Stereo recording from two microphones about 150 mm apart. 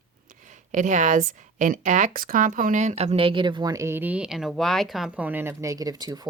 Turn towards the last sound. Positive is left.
turn(degrees=-25)  # may be behind; listen again after turning